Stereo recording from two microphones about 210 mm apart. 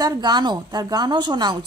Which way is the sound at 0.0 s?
20° right (ahead or behind).